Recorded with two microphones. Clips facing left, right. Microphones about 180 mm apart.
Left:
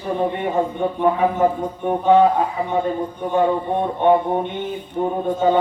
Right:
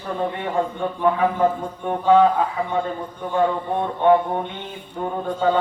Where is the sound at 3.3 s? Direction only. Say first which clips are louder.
Left 2 dB; 20° left (ahead or behind).